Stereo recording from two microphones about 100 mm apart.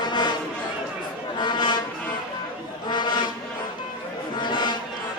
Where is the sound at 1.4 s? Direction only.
50° left (ahead or behind).